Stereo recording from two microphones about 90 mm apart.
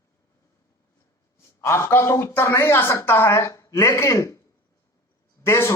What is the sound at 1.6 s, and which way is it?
A man's voice, 30° left (ahead or behind).